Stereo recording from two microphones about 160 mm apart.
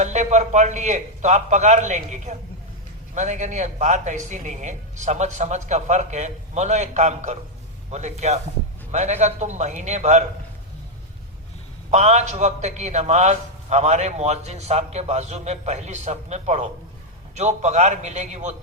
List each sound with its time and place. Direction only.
0.0 s a man's voice: 45° right (ahead or behind)
11.9 s a man's voice: 45° right (ahead or behind)